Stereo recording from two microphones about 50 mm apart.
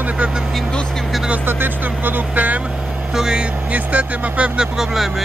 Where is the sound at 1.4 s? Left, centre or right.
Right.